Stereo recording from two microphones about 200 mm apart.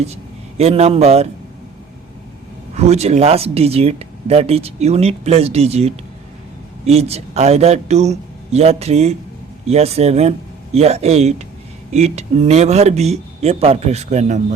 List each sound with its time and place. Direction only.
0.0 s speech: 30° right (ahead or behind)
2.7 s speech: 35° right (ahead or behind)